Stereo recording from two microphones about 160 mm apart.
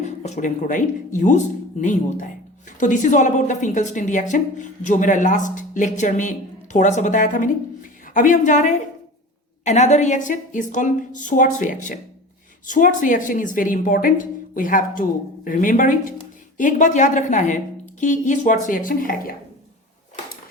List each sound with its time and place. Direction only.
0.0 s a woman's voice: 45° left (ahead or behind); by 19.4 s 65° left (ahead or behind)